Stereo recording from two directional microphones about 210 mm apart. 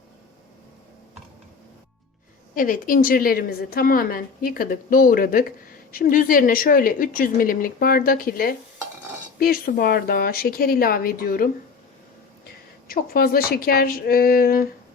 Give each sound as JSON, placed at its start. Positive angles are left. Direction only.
{"t": 2.6, "sound": "a woman's voice", "side_deg": 40}
{"t": 12.9, "sound": "a woman's voice", "side_deg": 45}